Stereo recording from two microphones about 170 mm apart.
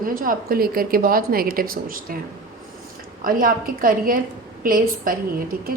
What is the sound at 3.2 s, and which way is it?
Speech, 55° right (ahead or behind).